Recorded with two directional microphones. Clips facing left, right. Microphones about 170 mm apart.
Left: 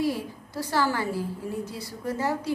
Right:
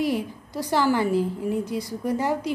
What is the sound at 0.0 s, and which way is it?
A woman's voice, 15° right (ahead or behind).